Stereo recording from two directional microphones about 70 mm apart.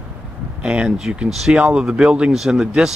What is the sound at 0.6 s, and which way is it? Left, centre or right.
Speech, centre.